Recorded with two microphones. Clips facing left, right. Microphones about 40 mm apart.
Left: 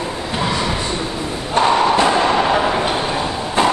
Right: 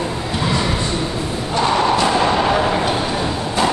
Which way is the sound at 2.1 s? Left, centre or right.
Centre.